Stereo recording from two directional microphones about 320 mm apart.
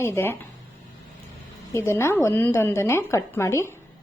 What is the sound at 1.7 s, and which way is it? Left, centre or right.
A woman's voice, centre.